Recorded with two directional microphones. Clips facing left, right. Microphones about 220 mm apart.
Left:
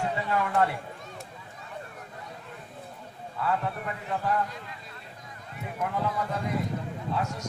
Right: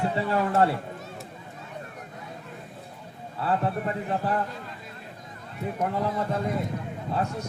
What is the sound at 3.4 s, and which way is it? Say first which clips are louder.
Speech: right 3 dB; 35° right (ahead or behind).